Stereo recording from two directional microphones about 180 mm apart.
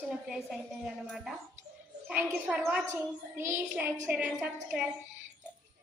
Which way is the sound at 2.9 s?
15° right (ahead or behind).